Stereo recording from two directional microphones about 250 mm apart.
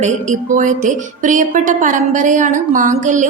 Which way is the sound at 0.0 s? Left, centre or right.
Right.